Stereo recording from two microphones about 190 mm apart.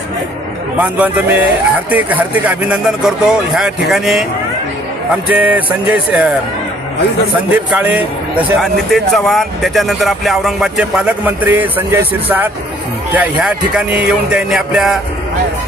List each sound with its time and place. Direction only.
0.8 s a man's voice: 5° right (ahead or behind)
5.3 s speech: 10° right (ahead or behind)
7.5 s a man's voice: 5° right (ahead or behind)